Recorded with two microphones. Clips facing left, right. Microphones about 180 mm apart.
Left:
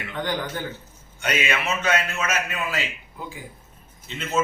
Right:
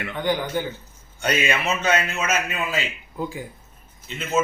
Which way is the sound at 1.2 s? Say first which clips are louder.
Right 2 dB; 30° right (ahead or behind).